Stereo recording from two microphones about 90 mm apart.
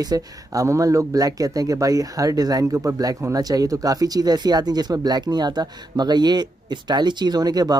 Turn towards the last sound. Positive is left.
turn(degrees=-45)  # may be behind; listen again after turning